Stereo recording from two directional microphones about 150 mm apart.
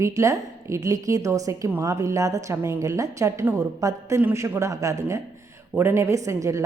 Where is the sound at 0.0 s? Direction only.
20° right (ahead or behind).